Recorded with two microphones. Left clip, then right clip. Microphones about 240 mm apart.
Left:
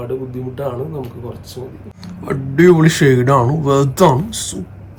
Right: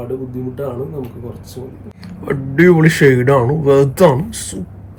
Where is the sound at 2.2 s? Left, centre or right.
Centre.